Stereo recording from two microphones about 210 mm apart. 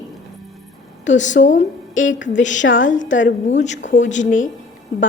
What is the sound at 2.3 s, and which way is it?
Speech, 35° left (ahead or behind).